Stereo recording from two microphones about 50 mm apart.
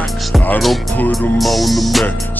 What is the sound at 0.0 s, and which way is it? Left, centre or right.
Music, centre.